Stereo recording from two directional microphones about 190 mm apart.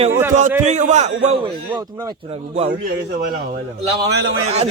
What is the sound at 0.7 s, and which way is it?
Speech, 40° right (ahead or behind).